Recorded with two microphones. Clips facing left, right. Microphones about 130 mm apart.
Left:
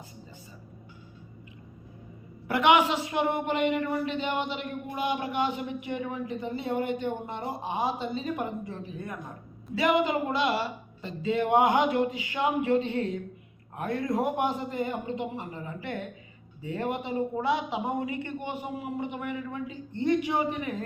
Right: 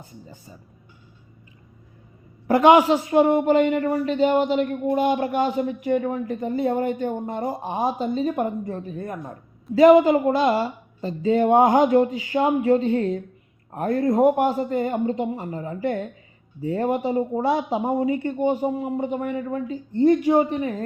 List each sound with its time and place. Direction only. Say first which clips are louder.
2.5 s speech: right 8 dB; 40° right (ahead or behind)